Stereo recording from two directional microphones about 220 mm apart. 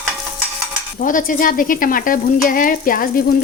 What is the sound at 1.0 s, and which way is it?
Frying, 35° left (ahead or behind).